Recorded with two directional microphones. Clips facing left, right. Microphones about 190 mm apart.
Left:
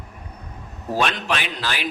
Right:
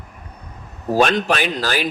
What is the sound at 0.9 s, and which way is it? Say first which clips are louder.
Speech: right 6 dB; 45° right (ahead or behind).